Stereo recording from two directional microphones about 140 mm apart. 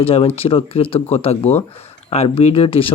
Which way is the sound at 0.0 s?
45° left (ahead or behind).